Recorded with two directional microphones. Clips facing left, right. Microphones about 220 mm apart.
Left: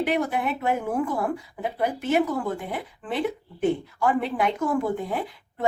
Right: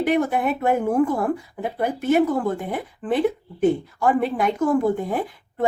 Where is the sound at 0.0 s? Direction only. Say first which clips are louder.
Right 4 dB; 45° right (ahead or behind).